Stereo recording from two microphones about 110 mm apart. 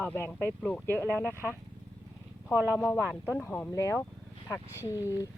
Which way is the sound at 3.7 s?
25° left (ahead or behind).